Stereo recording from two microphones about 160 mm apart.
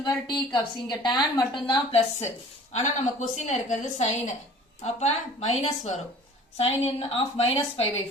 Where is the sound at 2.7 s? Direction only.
45° left (ahead or behind).